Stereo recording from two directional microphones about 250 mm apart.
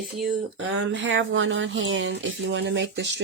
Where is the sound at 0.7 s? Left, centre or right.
Right.